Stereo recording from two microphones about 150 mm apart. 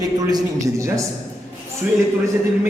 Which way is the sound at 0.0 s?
25° right (ahead or behind).